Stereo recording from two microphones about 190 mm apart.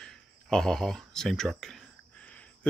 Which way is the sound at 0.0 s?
5° left (ahead or behind).